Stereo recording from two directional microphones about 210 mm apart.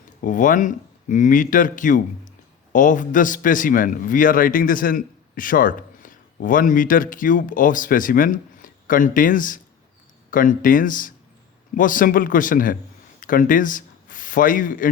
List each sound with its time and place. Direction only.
0.2 s a man's voice: 40° left (ahead or behind)